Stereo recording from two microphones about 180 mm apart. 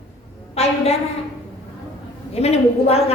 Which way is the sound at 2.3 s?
35° left (ahead or behind).